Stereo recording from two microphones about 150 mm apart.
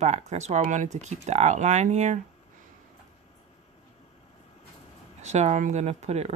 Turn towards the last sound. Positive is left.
turn(degrees=-45)  # may be behind; listen again after turning